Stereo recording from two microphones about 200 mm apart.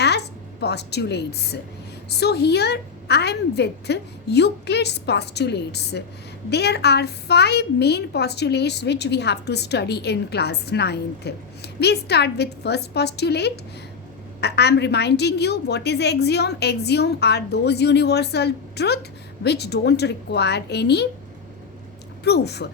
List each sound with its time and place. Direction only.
0.0 s a woman's voice: 55° left (ahead or behind)
22.2 s a woman's voice: 55° left (ahead or behind)